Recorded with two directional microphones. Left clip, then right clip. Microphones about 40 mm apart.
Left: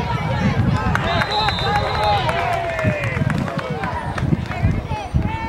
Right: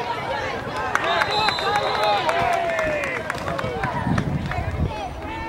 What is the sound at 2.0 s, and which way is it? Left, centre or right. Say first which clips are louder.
Run: left 2 dB; left.